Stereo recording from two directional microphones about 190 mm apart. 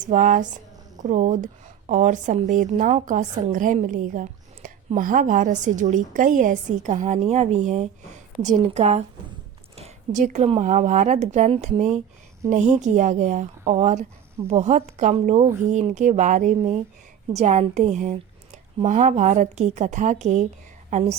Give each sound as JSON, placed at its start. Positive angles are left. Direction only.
{"t": 0.0, "sound": "a woman's voice", "side_deg": -40}